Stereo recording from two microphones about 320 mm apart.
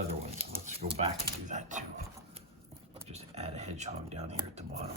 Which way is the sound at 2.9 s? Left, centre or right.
Centre.